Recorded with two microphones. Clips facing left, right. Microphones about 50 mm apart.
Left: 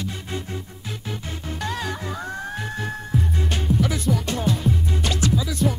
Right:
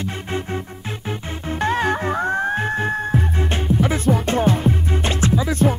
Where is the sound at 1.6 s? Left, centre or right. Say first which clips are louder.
Right 10 dB; right.